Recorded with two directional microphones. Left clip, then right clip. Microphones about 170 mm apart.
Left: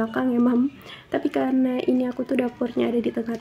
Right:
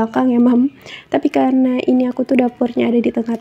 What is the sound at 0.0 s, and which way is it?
Speech, 35° right (ahead or behind).